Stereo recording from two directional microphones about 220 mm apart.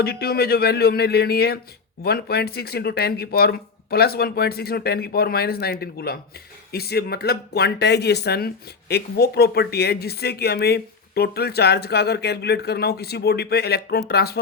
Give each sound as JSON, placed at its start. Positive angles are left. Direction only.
{"t": 0.0, "sound": "speech", "side_deg": 45}